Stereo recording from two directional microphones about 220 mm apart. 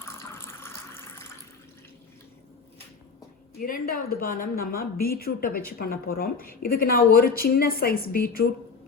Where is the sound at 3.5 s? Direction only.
40° left (ahead or behind).